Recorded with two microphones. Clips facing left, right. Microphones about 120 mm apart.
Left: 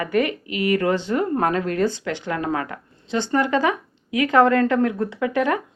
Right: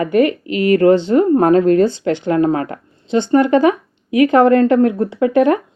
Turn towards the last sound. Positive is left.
turn(degrees=-30)  # may be behind; listen again after turning